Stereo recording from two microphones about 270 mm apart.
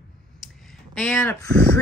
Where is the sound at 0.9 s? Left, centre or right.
Centre.